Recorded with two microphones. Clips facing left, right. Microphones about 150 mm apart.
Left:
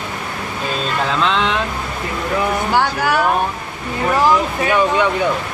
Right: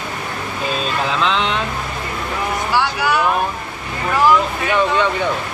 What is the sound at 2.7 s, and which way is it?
Speech, 50° left (ahead or behind).